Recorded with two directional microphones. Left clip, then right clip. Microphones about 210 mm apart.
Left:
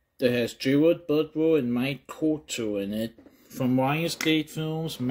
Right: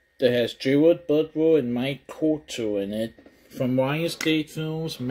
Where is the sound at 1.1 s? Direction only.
30° left (ahead or behind).